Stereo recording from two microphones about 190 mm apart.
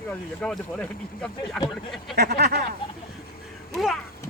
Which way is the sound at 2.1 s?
60° right (ahead or behind).